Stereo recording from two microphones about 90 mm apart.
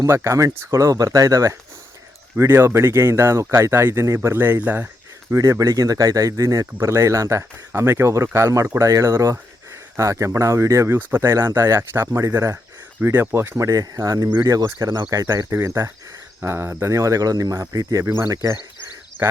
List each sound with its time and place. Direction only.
0.0 s speech: 30° right (ahead or behind)
2.3 s speech: 25° right (ahead or behind)
5.3 s speech: 40° right (ahead or behind); by 13.6 s 25° right (ahead or behind)
13.6 s speech: 40° right (ahead or behind)